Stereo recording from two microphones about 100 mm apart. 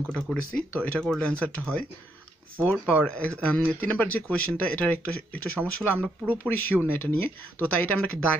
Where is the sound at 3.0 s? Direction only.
10° left (ahead or behind).